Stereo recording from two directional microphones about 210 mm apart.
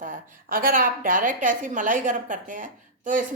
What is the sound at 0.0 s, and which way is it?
A woman's voice, 40° right (ahead or behind).